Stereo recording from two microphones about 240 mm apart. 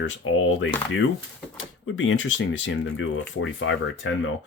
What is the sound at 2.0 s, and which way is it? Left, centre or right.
Speech, left.